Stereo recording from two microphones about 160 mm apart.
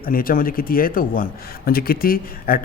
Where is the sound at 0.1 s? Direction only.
60° left (ahead or behind).